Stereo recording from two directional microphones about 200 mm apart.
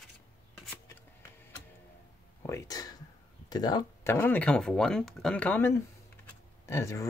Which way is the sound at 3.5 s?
20° left (ahead or behind).